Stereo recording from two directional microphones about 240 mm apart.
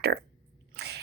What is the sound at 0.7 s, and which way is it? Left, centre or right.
Biting, right.